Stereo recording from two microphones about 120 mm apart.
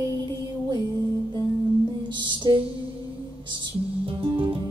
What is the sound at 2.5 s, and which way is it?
Music, 35° right (ahead or behind).